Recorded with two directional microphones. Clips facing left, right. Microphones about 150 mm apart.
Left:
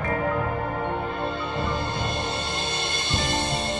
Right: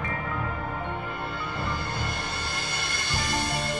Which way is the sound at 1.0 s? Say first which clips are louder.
Left 5 dB; 20° left (ahead or behind).